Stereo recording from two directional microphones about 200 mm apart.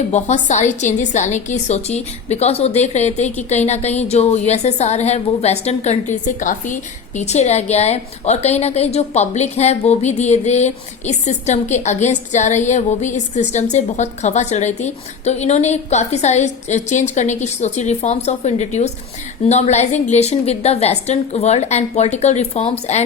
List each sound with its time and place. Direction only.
0.1 s a woman's voice: 35° left (ahead or behind)